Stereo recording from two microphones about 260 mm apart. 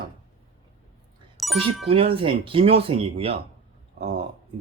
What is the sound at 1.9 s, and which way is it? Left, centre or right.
Speech, right.